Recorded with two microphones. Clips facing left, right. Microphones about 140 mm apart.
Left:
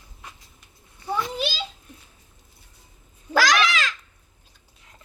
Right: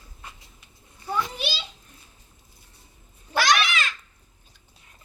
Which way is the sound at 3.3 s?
90° left.